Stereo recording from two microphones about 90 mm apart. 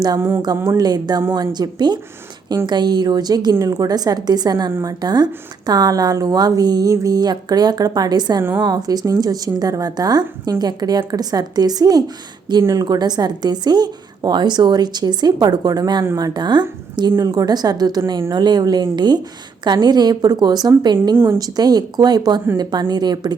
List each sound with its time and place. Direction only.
0.2 s a sound: 25° right (ahead or behind)
0.8 s speech: 50° right (ahead or behind)
17.2 s speech: 45° right (ahead or behind)